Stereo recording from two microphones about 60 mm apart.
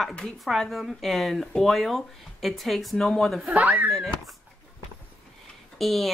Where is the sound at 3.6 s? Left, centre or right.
Right.